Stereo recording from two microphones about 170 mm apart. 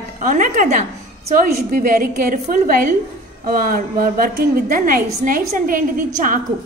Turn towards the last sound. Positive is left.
turn(degrees=-55)  # may be behind; listen again after turning